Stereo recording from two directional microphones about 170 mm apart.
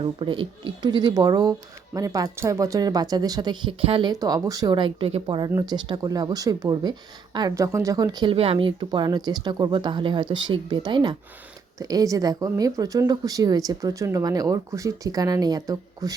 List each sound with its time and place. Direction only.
0.0 s speech: 30° right (ahead or behind)
4.1 s speech: 20° right (ahead or behind)